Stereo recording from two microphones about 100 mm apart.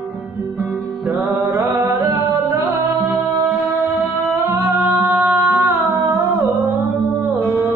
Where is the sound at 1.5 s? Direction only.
30° right (ahead or behind).